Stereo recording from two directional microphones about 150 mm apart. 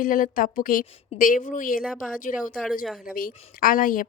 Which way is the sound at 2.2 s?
60° left (ahead or behind).